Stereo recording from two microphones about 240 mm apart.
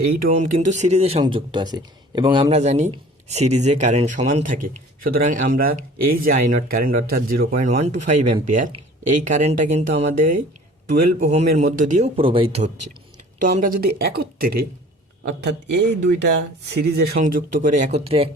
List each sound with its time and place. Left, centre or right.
0.2 s speech: right
13.4 s speech: right